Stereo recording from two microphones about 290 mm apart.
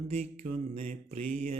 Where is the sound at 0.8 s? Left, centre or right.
Right.